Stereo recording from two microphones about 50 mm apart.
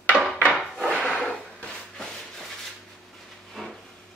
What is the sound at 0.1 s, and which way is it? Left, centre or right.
Wood, centre.